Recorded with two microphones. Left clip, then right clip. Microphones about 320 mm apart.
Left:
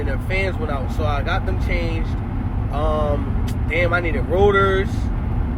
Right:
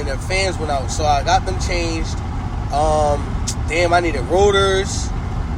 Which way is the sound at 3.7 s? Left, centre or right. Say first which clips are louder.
Right 4 dB; centre.